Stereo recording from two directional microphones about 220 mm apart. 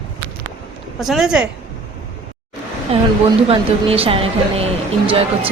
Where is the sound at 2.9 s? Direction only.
25° right (ahead or behind).